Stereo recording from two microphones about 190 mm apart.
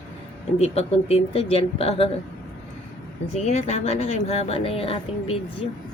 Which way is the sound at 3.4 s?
35° left (ahead or behind).